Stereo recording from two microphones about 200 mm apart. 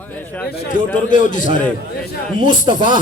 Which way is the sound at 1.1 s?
40° left (ahead or behind).